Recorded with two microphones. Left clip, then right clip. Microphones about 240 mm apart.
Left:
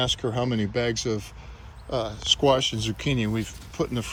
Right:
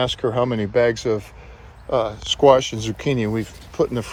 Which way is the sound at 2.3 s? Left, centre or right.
Centre.